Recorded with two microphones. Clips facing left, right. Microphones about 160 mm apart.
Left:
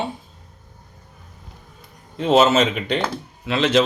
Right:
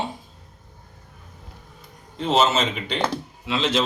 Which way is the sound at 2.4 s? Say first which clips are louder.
Left 4 dB; 55° left (ahead or behind).